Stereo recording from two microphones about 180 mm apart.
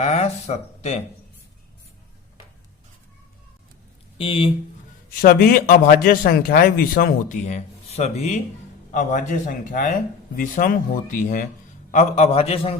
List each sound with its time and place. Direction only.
0.0 s speech: 40° left (ahead or behind)
4.2 s speech: 30° left (ahead or behind)
5.2 s speech: 55° left (ahead or behind); by 12.7 s 35° left (ahead or behind)